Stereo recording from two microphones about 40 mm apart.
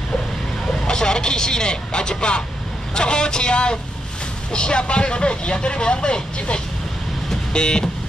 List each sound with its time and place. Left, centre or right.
0.7 s speech: centre